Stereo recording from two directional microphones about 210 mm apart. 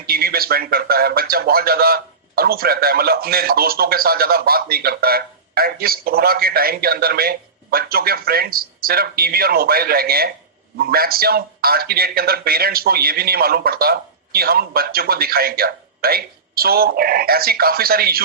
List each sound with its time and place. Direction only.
0.1 s a man's voice: 45° right (ahead or behind)